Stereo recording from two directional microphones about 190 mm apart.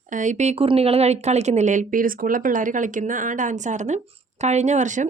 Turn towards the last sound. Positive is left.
turn(degrees=-40)  # may be behind; listen again after turning